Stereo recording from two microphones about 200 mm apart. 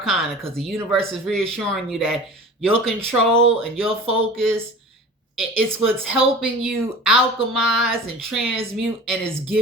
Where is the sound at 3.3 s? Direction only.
30° right (ahead or behind).